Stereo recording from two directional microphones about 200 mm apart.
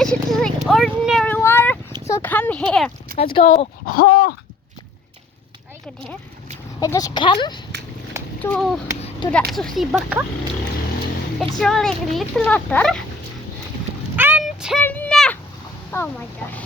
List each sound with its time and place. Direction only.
0.0 s a sound: 5° left (ahead or behind)
3.3 s speech: 35° left (ahead or behind)
6.7 s speech: 20° left (ahead or behind)
8.4 s speech: 5° left (ahead or behind)
11.3 s speech: centre (ahead or behind)
14.2 s a sound: 5° right (ahead or behind)
15.9 s a woman's voice: 10° left (ahead or behind)